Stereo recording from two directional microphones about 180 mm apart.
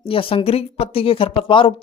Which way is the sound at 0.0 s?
30° left (ahead or behind).